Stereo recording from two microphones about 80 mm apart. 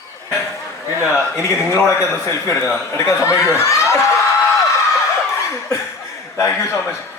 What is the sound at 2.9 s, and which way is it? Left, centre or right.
Speech, left.